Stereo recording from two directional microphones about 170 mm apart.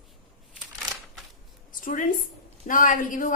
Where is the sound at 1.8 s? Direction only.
50° left (ahead or behind).